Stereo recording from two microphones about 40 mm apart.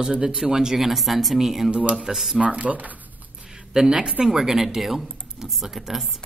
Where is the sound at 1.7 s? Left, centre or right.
Right.